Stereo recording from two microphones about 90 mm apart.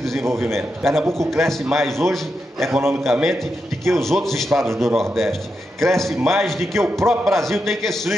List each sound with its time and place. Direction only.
0.2 s a man's voice: 30° right (ahead or behind)
0.6 s a man's voice: centre (ahead or behind)